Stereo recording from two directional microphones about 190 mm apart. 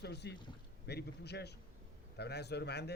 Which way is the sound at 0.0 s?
60° left (ahead or behind).